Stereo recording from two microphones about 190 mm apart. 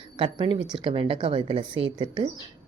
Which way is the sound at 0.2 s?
30° right (ahead or behind).